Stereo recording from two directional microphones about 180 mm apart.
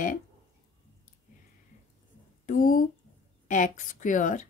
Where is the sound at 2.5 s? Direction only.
50° left (ahead or behind).